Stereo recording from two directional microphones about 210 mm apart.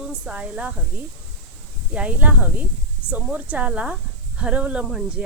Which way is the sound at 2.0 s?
5° right (ahead or behind).